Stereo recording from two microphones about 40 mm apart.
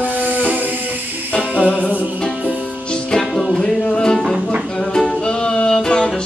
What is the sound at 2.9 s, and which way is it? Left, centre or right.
Music, left.